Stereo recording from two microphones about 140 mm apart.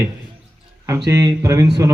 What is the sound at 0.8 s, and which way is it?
A man's voice, 20° right (ahead or behind).